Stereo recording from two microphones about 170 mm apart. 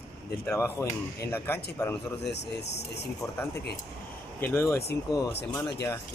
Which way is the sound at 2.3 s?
80° left.